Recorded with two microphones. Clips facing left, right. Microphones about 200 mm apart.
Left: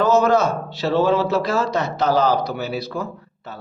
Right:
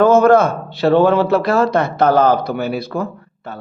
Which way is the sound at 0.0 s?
55° right (ahead or behind).